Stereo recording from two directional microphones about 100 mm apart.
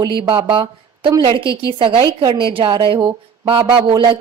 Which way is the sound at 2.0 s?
50° right (ahead or behind).